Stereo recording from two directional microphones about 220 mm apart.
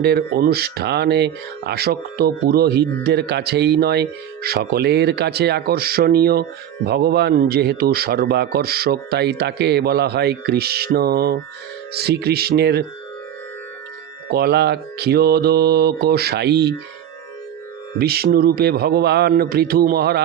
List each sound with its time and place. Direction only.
0.0 s a man's voice: 45° right (ahead or behind)
14.3 s a man's voice: 45° right (ahead or behind)
18.0 s a man's voice: 45° right (ahead or behind)